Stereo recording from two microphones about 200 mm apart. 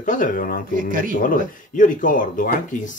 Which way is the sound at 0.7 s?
45° right (ahead or behind).